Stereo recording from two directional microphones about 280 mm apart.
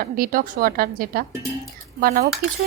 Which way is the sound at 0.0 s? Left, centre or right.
Right.